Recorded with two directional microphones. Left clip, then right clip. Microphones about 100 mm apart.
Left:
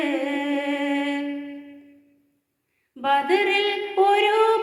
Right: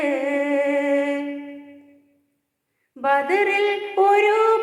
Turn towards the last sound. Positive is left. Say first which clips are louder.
# right 2 dB
turn(degrees=20)  # may be behind; listen again after turning